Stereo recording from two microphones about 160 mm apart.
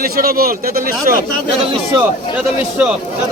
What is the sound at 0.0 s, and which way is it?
A man's voice, 65° right (ahead or behind).